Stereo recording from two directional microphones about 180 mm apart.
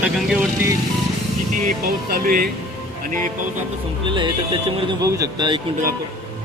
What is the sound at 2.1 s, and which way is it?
Speech, 55° right (ahead or behind).